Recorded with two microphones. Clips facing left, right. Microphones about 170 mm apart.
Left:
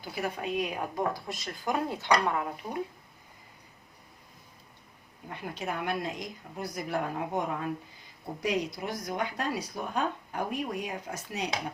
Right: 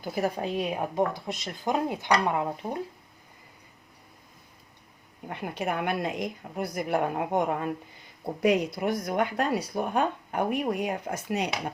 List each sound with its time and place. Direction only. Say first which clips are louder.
0.0 s a woman's voice: right 5 dB; 40° right (ahead or behind); by 2.5 s 20° right (ahead or behind)
5.3 s speech: right 5 dB; 60° right (ahead or behind)